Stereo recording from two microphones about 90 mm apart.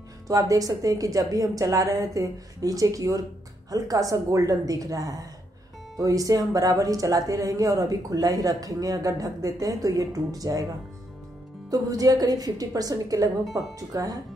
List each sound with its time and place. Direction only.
0.3 s speech: 40° right (ahead or behind)
11.7 s a woman's voice: 45° right (ahead or behind)